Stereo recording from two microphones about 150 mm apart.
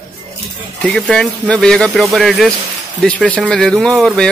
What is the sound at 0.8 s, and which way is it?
Speech, 5° left (ahead or behind).